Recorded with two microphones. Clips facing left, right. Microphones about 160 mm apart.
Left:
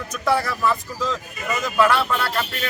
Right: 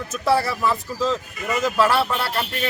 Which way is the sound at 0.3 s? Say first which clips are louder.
Right 1 dB; 30° right (ahead or behind).